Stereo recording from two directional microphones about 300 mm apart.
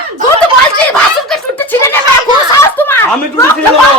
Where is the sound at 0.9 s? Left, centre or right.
Centre.